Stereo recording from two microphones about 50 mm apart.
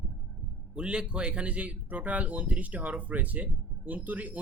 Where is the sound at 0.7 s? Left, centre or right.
Centre.